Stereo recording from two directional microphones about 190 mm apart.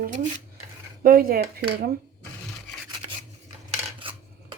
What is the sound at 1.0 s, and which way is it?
Speech, 50° right (ahead or behind).